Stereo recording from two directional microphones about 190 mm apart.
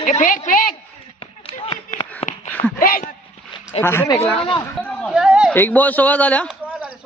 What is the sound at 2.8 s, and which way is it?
Speech, 50° left (ahead or behind).